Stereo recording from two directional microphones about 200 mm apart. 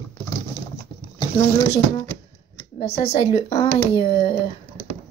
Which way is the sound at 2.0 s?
15° left (ahead or behind).